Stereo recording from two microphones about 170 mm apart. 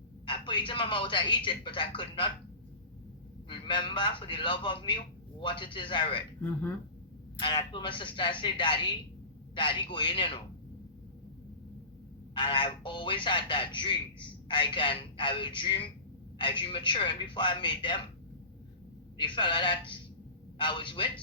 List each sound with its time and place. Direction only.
0.3 s speech: 30° left (ahead or behind)
3.5 s speech: 30° left (ahead or behind)
6.4 s speech: 10° left (ahead or behind)
7.3 s speech: 25° left (ahead or behind)
12.3 s speech: 30° left (ahead or behind)
19.1 s speech: 30° left (ahead or behind)